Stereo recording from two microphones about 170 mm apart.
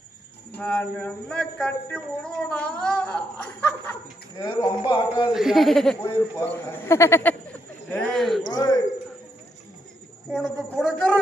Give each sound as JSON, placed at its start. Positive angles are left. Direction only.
{"t": 0.6, "sound": "a woman's voice", "side_deg": 10}
{"t": 4.4, "sound": "speech", "side_deg": 25}
{"t": 5.3, "sound": "a woman's voice", "side_deg": 0}
{"t": 7.9, "sound": "a sound", "side_deg": 5}
{"t": 8.5, "sound": "a sound", "side_deg": 25}
{"t": 10.3, "sound": "speech", "side_deg": 0}